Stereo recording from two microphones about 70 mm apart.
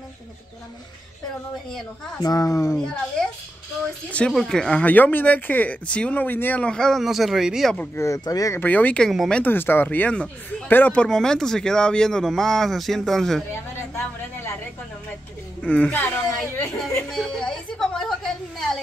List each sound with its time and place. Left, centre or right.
2.1 s speech: left
2.8 s speech: centre
4.3 s speech: centre
4.8 s speech: left
6.2 s speech: left
6.6 s speech: centre
7.0 s speech: centre
7.9 s speech: left
8.3 s speech: left
8.5 s speech: left
11.0 s speech: centre
13.5 s a sound: left
15.6 s speech: centre
17.1 s a sound: centre